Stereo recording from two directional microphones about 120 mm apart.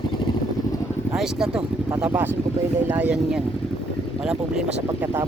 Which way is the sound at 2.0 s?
15° right (ahead or behind).